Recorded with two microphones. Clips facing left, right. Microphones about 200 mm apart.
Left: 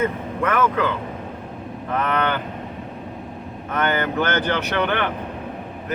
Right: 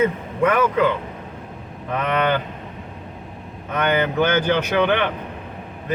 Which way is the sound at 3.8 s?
15° right (ahead or behind).